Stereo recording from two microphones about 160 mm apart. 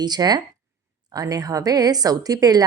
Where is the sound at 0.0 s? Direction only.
25° right (ahead or behind).